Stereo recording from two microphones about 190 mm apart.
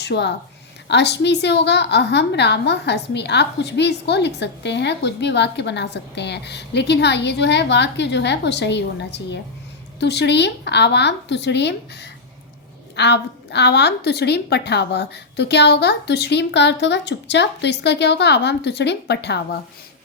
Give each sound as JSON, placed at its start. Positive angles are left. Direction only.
{"t": 0.0, "sound": "a woman's voice", "side_deg": 65}